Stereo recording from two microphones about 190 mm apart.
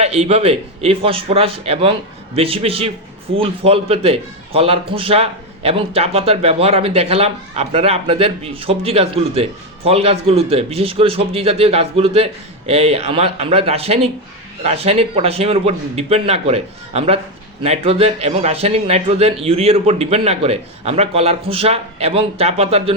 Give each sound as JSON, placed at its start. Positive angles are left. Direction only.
{"t": 0.0, "sound": "a man's voice", "side_deg": -35}